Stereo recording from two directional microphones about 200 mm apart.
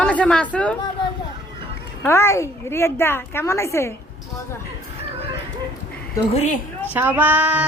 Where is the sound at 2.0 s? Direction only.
15° left (ahead or behind).